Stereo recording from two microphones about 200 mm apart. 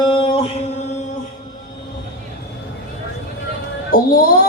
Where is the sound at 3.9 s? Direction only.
45° left (ahead or behind).